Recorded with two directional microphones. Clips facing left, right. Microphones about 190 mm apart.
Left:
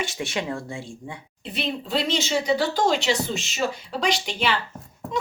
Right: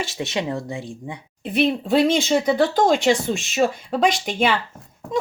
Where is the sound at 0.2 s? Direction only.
20° right (ahead or behind).